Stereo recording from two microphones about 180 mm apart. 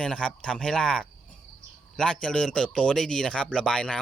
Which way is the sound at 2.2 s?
5° left (ahead or behind).